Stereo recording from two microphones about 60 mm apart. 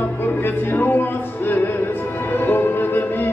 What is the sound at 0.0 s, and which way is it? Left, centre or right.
Music, left.